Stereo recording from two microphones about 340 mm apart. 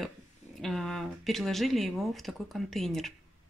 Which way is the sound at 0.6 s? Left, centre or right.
Centre.